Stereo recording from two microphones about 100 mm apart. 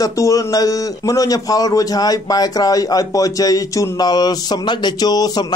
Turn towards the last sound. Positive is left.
turn(degrees=40)  # may be behind; listen again after turning